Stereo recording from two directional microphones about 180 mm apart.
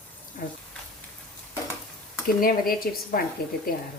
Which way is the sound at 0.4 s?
45° left (ahead or behind).